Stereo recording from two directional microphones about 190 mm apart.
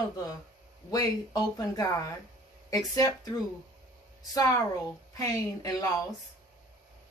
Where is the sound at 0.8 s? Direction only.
20° left (ahead or behind).